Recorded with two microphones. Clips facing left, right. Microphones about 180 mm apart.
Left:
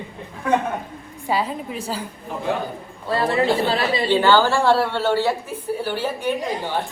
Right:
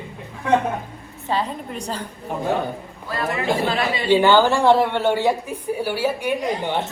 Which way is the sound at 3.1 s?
30° left (ahead or behind).